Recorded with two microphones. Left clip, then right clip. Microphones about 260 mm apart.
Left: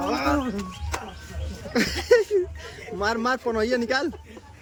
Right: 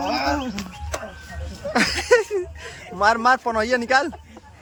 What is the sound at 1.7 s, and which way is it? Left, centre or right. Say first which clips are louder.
Speech: right 2 dB; centre.